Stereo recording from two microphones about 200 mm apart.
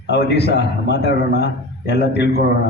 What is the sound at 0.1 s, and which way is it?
A man's voice, 55° left (ahead or behind).